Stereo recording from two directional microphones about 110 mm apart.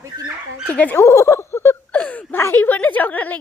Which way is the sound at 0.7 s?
15° left (ahead or behind).